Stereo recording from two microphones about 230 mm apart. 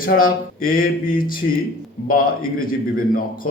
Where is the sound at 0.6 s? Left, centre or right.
Left.